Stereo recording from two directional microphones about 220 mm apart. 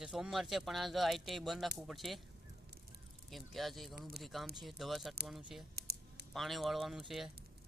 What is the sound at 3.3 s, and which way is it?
Speech, centre (ahead or behind).